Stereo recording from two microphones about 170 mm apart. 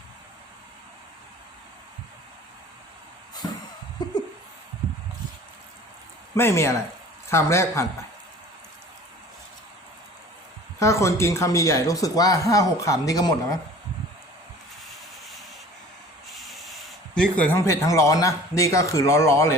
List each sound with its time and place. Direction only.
6.3 s speech: 15° left (ahead or behind)
10.8 s speech: 15° left (ahead or behind)
16.5 s a sound: centre (ahead or behind)
17.2 s speech: 10° left (ahead or behind)